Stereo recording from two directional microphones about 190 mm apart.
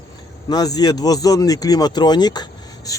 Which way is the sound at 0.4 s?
20° left (ahead or behind).